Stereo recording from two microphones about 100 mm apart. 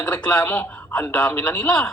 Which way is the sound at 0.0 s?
15° left (ahead or behind).